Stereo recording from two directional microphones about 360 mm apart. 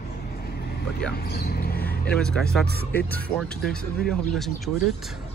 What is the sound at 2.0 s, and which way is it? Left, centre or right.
Speech, centre.